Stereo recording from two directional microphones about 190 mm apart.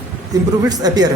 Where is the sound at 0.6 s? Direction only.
20° right (ahead or behind).